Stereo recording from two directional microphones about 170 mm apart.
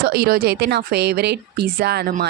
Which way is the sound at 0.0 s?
65° right (ahead or behind).